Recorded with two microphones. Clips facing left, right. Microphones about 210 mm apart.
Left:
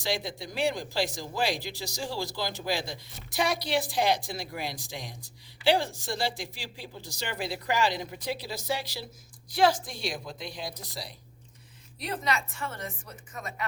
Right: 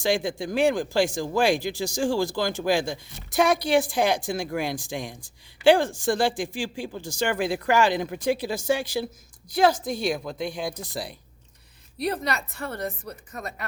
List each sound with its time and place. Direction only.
0.0 s speech: 50° right (ahead or behind)
12.5 s speech: 35° right (ahead or behind)